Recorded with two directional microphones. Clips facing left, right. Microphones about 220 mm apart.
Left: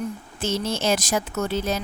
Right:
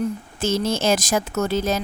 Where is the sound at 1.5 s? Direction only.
90° right.